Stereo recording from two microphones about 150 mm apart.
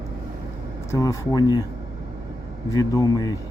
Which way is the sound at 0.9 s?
25° left (ahead or behind).